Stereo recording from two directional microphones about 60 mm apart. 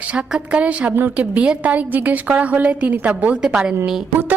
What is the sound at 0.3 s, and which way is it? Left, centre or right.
A woman's voice, centre.